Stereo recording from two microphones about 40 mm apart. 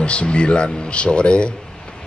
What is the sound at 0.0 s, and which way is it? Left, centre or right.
Speech, left.